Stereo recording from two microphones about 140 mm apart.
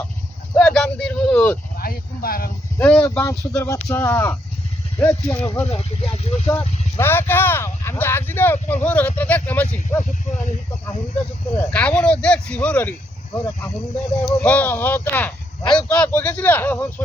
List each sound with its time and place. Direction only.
0.5 s a sound: 5° left (ahead or behind)
1.7 s speech: 90° left
2.7 s speech: 10° left (ahead or behind)
5.7 s speech: 50° left (ahead or behind)
6.9 s speech: 15° left (ahead or behind)
11.5 s speech: 10° left (ahead or behind)
14.3 s speech: 10° left (ahead or behind)